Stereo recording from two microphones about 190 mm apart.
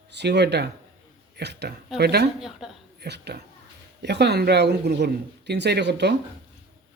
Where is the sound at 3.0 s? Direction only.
60° right (ahead or behind).